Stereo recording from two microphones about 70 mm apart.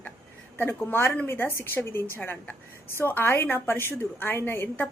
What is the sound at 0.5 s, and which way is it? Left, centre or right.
A woman's voice, left.